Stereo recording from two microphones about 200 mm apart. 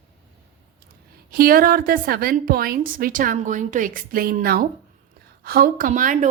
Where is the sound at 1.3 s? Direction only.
45° right (ahead or behind).